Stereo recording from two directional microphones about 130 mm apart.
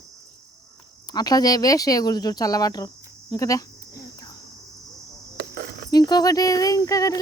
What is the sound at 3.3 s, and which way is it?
Cricket, 25° left (ahead or behind).